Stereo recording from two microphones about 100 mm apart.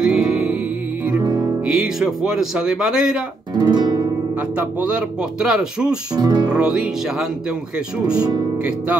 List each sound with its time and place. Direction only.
0.0 s music: 5° right (ahead or behind)
1.1 s music: 40° right (ahead or behind)
1.8 s speech: 5° right (ahead or behind)
3.5 s music: 45° right (ahead or behind)
4.4 s speech: 15° right (ahead or behind)
6.1 s speech: 40° right (ahead or behind)
6.5 s speech: 5° right (ahead or behind)